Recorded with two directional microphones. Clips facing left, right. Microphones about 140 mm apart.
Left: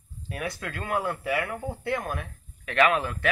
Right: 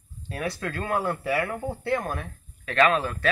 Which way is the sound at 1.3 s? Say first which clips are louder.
Right 2 dB; 5° right (ahead or behind).